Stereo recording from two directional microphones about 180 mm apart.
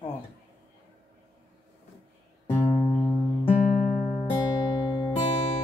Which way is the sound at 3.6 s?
40° left (ahead or behind).